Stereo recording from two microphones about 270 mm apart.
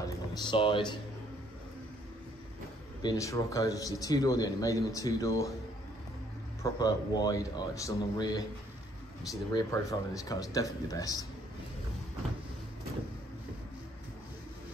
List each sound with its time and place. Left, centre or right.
0.0 s a sound: centre
3.0 s a man's voice: centre
6.6 s a man's voice: centre